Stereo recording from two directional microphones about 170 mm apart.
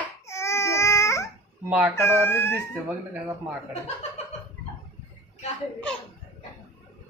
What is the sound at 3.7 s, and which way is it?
Chuckle, 40° left (ahead or behind).